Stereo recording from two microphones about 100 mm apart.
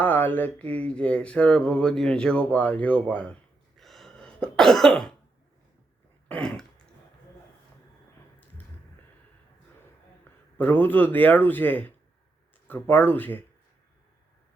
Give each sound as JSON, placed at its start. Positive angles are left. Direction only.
{"t": 0.0, "sound": "speech", "side_deg": 20}
{"t": 3.8, "sound": "cough", "side_deg": 0}
{"t": 6.2, "sound": "throat clearing", "side_deg": 10}
{"t": 10.6, "sound": "a man's voice", "side_deg": 20}